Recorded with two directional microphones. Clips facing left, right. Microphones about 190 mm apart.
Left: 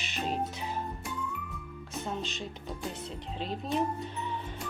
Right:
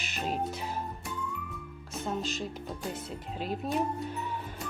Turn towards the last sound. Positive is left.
turn(degrees=-5)  # may be behind; listen again after turning